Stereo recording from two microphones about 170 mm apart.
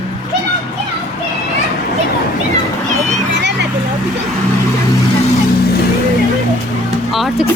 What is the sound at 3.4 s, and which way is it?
Vehicle, 90° right.